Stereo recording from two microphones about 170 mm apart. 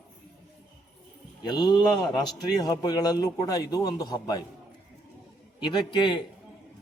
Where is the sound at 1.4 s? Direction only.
25° left (ahead or behind).